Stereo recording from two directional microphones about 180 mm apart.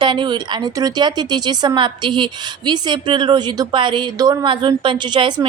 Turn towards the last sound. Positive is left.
turn(degrees=-25)  # may be behind; listen again after turning